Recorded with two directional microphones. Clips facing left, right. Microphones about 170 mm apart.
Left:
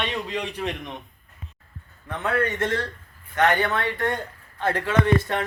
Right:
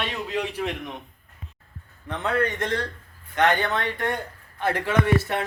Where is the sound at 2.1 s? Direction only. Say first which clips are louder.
Even; 15° right (ahead or behind).